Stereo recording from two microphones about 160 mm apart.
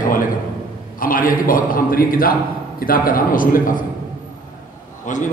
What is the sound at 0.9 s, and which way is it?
A man's voice, 60° left (ahead or behind).